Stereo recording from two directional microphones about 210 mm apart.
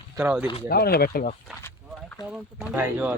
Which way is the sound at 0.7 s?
50° left (ahead or behind).